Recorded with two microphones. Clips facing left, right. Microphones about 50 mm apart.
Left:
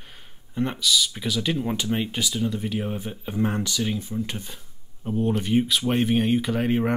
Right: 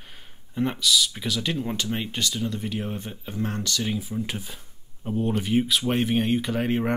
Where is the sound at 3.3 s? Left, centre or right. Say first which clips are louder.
Left 4 dB; centre.